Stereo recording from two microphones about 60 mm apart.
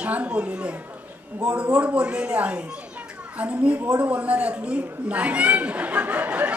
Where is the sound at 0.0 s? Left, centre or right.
Right.